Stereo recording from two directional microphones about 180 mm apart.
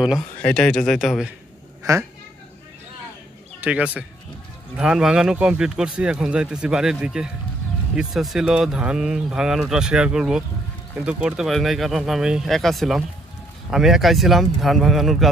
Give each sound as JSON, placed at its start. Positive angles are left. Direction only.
{"t": 0.4, "sound": "speech", "side_deg": 5}
{"t": 1.8, "sound": "speech", "side_deg": -15}
{"t": 3.6, "sound": "speech", "side_deg": -5}